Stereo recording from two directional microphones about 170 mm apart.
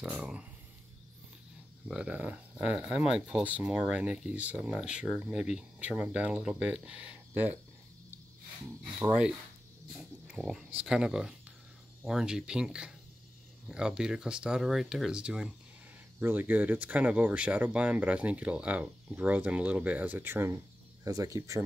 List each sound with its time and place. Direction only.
0.0 s speech: 5° right (ahead or behind)
1.9 s speech: 10° right (ahead or behind)
9.0 s speech: 10° right (ahead or behind)